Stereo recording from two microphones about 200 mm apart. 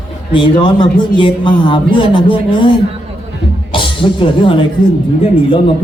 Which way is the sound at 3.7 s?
25° left (ahead or behind).